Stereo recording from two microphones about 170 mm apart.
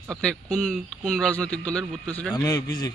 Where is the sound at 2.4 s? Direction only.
20° left (ahead or behind).